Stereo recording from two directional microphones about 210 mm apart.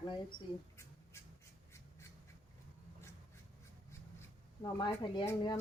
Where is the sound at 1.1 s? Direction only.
15° left (ahead or behind).